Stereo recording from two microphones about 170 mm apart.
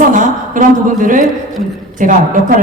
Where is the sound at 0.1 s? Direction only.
50° right (ahead or behind).